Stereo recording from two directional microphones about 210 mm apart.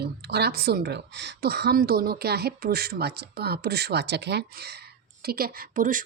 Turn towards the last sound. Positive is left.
turn(degrees=-40)  # may be behind; listen again after turning